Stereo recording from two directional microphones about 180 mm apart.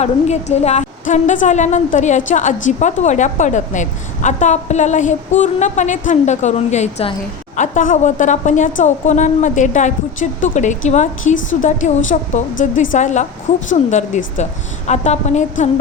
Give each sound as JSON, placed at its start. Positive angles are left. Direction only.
{"t": 0.0, "sound": "a woman's voice", "side_deg": 40}
{"t": 12.3, "sound": "a woman's voice", "side_deg": 45}